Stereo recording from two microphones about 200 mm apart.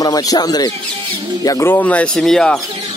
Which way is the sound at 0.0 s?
20° left (ahead or behind).